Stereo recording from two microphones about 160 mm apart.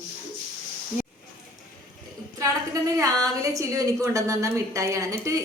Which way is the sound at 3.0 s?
20° right (ahead or behind).